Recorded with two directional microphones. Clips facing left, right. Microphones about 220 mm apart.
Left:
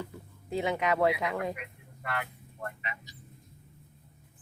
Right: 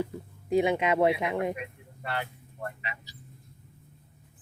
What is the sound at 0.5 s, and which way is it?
Speech, 20° right (ahead or behind).